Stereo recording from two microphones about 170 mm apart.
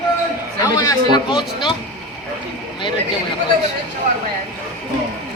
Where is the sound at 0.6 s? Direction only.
20° left (ahead or behind).